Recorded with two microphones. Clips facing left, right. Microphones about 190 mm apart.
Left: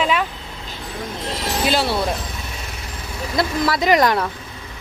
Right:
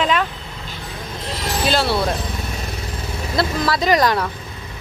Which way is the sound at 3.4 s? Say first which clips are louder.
Even; 15° left (ahead or behind).